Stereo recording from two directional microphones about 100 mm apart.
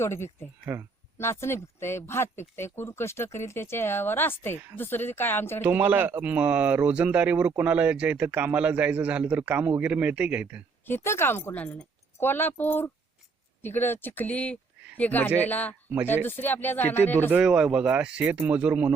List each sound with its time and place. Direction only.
0.0 s speech: 25° left (ahead or behind)
0.6 s speech: 25° right (ahead or behind)
1.2 s speech: 25° left (ahead or behind)
5.6 s speech: 15° right (ahead or behind)
10.8 s speech: 25° left (ahead or behind)
17.3 s speech: 5° right (ahead or behind)